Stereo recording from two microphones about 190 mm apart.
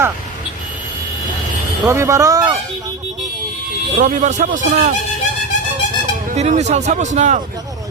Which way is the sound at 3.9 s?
40° right (ahead or behind).